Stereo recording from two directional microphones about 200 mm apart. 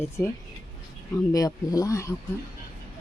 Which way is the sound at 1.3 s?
20° left (ahead or behind).